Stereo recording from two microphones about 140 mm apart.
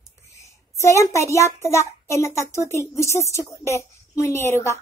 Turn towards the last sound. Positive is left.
turn(degrees=20)  # may be behind; listen again after turning